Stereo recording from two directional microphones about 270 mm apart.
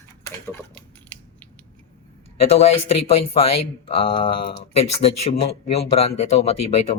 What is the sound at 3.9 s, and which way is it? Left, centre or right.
Speech, left.